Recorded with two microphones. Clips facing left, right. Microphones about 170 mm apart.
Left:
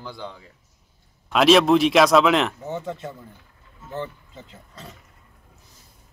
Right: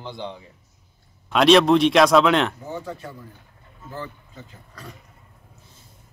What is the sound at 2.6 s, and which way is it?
Speech, 25° left (ahead or behind).